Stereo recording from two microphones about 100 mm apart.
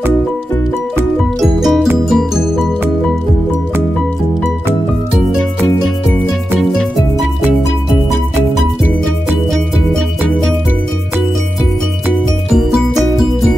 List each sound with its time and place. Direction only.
1.4 s music: 5° right (ahead or behind)